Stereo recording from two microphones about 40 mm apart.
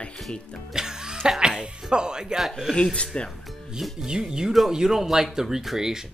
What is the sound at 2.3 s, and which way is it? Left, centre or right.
Speech, centre.